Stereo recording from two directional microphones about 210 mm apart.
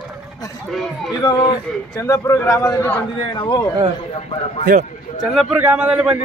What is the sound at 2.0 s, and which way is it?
A man's voice, 15° left (ahead or behind).